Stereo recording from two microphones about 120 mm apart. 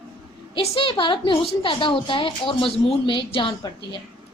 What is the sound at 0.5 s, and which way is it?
A woman's voice, 45° left (ahead or behind).